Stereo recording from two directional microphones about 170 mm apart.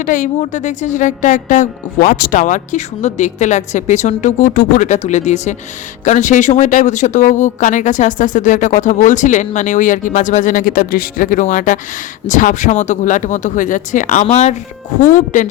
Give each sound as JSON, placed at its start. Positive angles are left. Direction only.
{"t": 0.0, "sound": "speech", "side_deg": 50}